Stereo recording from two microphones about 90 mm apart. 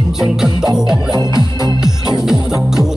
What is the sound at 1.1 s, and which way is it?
Music, 50° right (ahead or behind).